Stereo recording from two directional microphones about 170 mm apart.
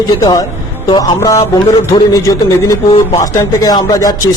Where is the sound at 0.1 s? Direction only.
20° left (ahead or behind).